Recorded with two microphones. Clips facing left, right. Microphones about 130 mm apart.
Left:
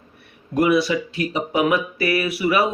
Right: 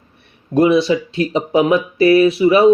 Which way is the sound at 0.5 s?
25° right (ahead or behind).